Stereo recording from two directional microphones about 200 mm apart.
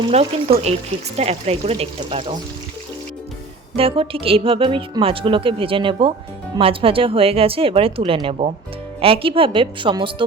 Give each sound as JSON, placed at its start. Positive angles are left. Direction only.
{"t": 0.1, "sound": "speech", "side_deg": -30}
{"t": 3.8, "sound": "speech", "side_deg": -30}